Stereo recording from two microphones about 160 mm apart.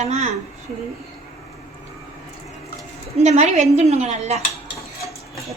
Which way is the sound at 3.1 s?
45° right (ahead or behind).